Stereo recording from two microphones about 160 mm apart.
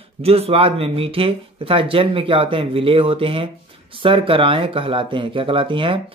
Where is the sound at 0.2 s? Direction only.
40° right (ahead or behind).